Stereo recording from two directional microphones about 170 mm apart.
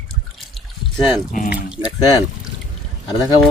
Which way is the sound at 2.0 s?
25° left (ahead or behind).